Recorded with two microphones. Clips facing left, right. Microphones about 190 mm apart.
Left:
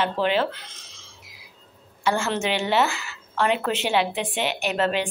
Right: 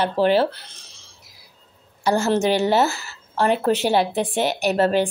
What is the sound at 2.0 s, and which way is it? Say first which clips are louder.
Speech: right 5 dB; 40° right (ahead or behind).